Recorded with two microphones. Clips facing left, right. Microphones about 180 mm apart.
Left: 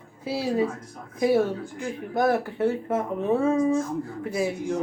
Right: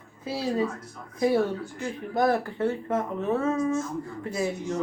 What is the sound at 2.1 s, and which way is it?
A woman's voice, 5° left (ahead or behind).